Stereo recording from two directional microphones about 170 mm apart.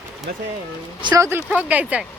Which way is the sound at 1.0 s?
20° right (ahead or behind).